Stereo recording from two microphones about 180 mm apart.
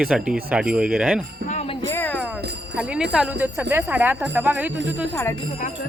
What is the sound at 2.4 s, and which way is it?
Jingle bell, 65° right (ahead or behind).